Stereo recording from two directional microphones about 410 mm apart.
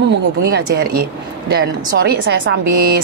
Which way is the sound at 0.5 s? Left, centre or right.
Right.